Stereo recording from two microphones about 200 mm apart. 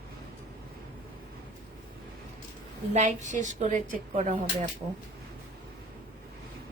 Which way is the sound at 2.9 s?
35° right (ahead or behind).